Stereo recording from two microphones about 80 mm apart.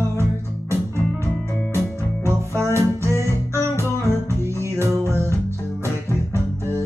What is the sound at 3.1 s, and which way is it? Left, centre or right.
Music, left.